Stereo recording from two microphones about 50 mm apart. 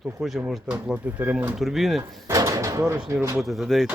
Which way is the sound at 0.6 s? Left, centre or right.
Right.